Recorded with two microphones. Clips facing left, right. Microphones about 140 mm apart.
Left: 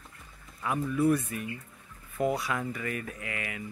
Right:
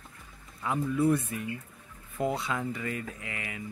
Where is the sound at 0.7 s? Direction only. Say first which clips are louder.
Even; 25° right (ahead or behind).